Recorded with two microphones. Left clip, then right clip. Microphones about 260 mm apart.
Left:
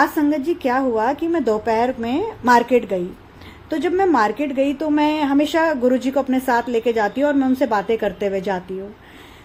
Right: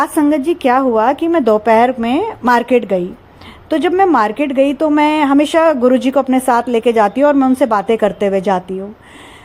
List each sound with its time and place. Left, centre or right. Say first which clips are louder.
0.0 s a woman's voice: right 4 dB; right